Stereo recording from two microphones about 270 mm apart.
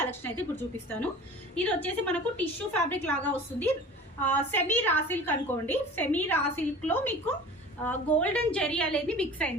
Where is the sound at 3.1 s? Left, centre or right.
Centre.